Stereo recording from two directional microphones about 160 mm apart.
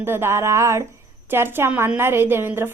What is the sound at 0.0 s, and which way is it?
A woman's voice, 15° right (ahead or behind).